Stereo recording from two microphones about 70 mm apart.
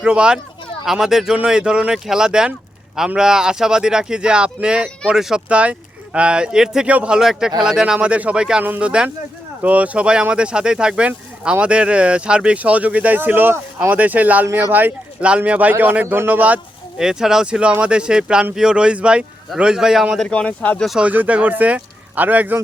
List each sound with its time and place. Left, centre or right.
0.0 s speech: centre
17.0 s speech: centre
20.2 s speech: centre
21.0 s speech: right